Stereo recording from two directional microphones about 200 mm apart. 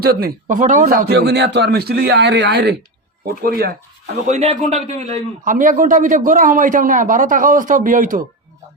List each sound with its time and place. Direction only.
0.0 s speech: 50° right (ahead or behind)
4.3 s a man's voice: 35° right (ahead or behind)